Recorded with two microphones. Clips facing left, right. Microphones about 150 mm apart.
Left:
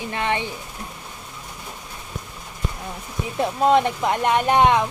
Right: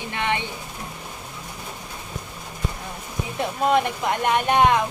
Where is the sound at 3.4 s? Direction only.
25° left (ahead or behind).